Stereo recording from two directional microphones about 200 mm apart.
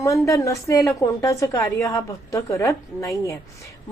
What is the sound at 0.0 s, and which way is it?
A woman's voice, 15° left (ahead or behind).